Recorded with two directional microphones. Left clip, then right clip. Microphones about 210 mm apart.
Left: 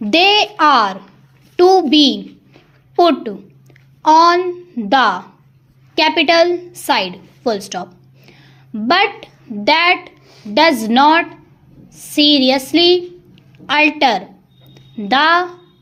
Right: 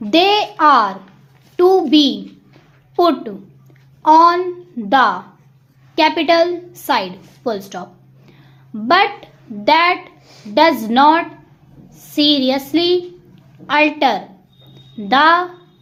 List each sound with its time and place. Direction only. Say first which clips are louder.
0.0 s a woman's voice: left 2 dB; 25° left (ahead or behind)
8.3 s a sound: left 3 dB; 25° left (ahead or behind)
8.9 s a woman's voice: right 1 dB; 25° left (ahead or behind)